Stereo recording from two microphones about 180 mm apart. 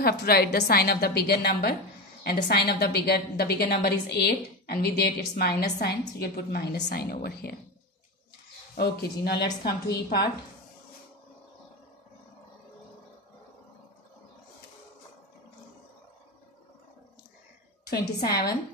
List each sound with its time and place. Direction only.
0.0 s a woman's voice: 60° left (ahead or behind)
8.7 s a woman's voice: 65° left (ahead or behind)
17.8 s a woman's voice: 60° left (ahead or behind)